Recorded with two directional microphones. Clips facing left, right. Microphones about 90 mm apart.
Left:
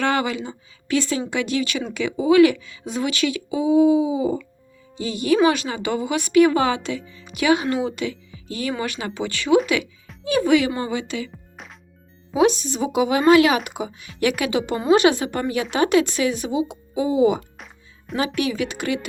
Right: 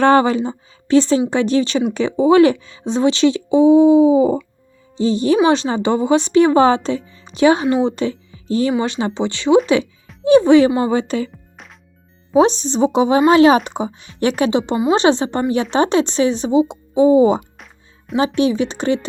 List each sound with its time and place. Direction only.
0.0 s speech: 35° right (ahead or behind)
10.9 s speech: 40° right (ahead or behind)
11.3 s music: centre (ahead or behind)
12.3 s speech: 30° right (ahead or behind)